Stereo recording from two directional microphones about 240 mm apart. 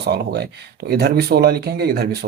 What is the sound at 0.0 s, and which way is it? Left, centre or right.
Speech, right.